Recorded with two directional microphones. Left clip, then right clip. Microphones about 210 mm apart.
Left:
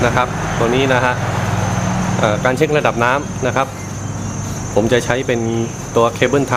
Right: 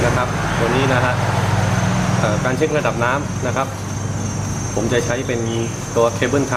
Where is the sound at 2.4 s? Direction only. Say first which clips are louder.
Left 4 dB; 45° left (ahead or behind).